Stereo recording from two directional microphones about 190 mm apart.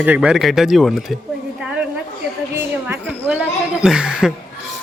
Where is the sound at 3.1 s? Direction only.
10° right (ahead or behind).